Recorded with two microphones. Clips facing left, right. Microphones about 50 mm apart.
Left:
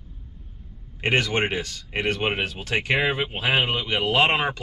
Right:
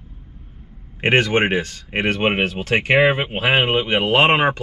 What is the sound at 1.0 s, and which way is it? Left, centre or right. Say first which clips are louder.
Speech: right 6 dB; right.